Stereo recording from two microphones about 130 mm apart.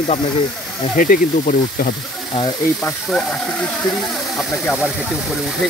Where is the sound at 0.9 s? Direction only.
90° left.